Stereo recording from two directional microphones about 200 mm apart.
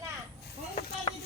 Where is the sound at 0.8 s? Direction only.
30° left (ahead or behind).